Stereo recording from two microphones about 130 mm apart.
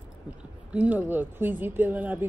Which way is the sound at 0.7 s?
10° right (ahead or behind).